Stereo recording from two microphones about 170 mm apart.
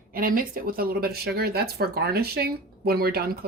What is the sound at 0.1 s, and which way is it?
Speech, 60° right (ahead or behind).